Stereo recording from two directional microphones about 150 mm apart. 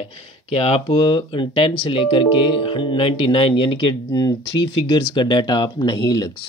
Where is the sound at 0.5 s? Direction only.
40° left (ahead or behind).